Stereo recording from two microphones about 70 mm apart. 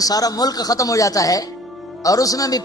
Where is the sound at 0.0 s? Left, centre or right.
Left.